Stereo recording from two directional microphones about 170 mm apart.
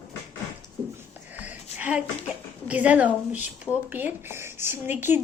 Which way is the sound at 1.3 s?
10° right (ahead or behind).